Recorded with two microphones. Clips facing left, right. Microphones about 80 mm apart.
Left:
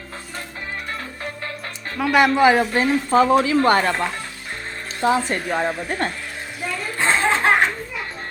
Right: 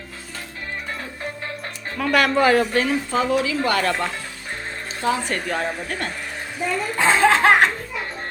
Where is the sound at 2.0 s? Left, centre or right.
Centre.